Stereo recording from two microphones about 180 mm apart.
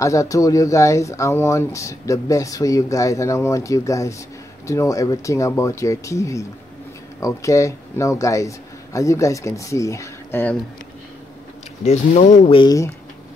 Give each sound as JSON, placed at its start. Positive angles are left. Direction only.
{"t": 0.0, "sound": "speech", "side_deg": 15}
{"t": 11.8, "sound": "speech", "side_deg": 40}
{"t": 12.5, "sound": "speech", "side_deg": 20}